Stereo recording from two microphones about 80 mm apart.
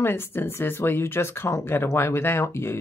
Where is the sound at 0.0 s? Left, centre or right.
Left.